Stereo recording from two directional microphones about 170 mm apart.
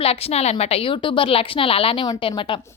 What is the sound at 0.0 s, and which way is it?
A woman's voice, 35° left (ahead or behind).